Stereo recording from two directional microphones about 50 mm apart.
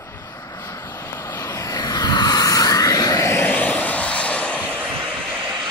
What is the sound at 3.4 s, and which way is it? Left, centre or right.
Vehicle, left.